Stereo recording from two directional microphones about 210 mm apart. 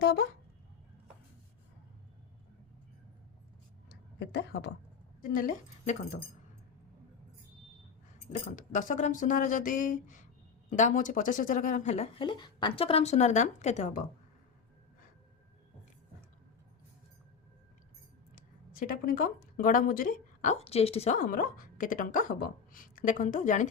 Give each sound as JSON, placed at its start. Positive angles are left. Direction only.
{"t": 0.0, "sound": "speech", "side_deg": 50}
{"t": 3.8, "sound": "a sound", "side_deg": 55}
{"t": 5.3, "sound": "speech", "side_deg": 40}
{"t": 8.3, "sound": "speech", "side_deg": 35}
{"t": 18.3, "sound": "speech", "side_deg": 40}